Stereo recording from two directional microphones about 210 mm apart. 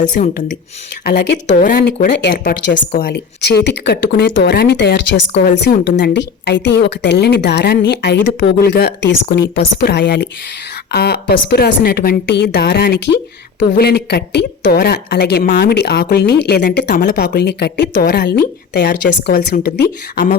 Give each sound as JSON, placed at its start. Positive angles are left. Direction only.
{"t": 0.2, "sound": "a woman's voice", "side_deg": 45}
{"t": 2.4, "sound": "a woman's voice", "side_deg": 40}
{"t": 2.9, "sound": "a woman's voice", "side_deg": 50}